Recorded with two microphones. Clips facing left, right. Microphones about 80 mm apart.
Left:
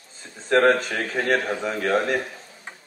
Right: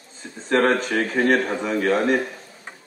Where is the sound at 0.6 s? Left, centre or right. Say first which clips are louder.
Even; right.